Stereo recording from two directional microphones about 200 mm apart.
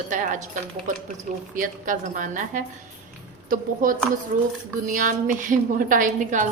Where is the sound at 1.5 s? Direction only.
40° right (ahead or behind).